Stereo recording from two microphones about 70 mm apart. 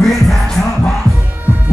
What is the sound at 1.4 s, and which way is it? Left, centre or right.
Music, right.